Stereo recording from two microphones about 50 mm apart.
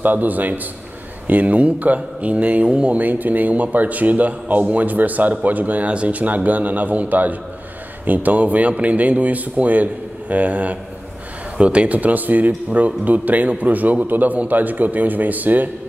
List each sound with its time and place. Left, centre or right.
0.0 s a man's voice: right
3.0 s a man's voice: right